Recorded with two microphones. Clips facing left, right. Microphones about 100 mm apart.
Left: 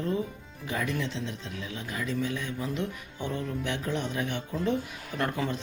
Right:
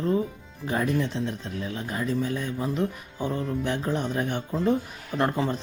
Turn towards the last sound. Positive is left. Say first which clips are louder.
# right 5 dB
turn(degrees=-30)  # may be behind; listen again after turning